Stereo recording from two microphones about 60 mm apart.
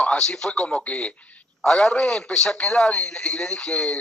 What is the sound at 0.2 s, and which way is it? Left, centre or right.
A man's voice, centre.